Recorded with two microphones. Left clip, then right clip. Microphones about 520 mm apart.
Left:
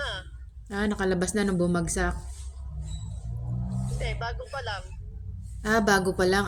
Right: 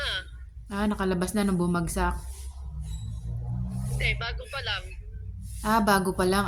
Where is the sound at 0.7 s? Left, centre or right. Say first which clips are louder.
Left 1 dB; right.